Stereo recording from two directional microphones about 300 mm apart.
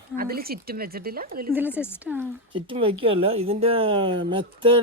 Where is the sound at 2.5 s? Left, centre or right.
Centre.